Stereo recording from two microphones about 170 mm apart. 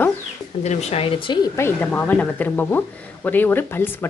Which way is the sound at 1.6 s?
15° left (ahead or behind).